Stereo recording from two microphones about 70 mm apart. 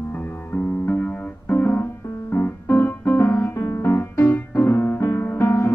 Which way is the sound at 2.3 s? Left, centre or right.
Left.